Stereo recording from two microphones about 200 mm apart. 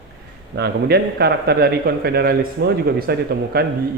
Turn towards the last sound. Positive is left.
turn(degrees=-50)  # may be behind; listen again after turning